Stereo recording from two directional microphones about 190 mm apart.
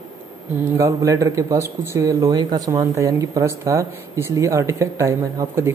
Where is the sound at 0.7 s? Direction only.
15° right (ahead or behind).